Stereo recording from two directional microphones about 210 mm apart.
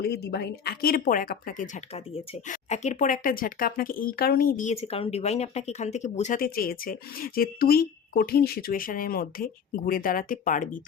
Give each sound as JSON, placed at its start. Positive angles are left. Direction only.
{"t": 0.0, "sound": "speech", "side_deg": 50}